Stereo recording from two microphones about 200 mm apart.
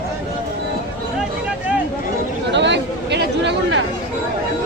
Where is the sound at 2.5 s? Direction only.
60° right (ahead or behind).